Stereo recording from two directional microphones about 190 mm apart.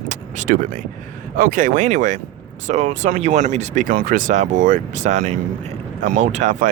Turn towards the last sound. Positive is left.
turn(degrees=-40)  # may be behind; listen again after turning